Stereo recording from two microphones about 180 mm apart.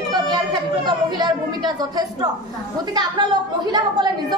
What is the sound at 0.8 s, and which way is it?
A woman's voice, 25° right (ahead or behind).